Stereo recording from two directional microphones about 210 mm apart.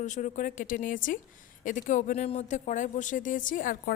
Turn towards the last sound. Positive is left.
turn(degrees=40)  # may be behind; listen again after turning